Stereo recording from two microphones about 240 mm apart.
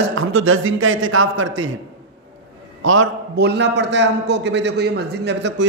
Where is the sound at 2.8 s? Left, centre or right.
Right.